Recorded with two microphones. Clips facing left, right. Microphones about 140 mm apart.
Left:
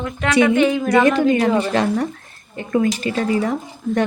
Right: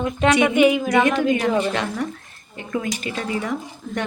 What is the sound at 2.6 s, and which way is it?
Speech, 35° left (ahead or behind).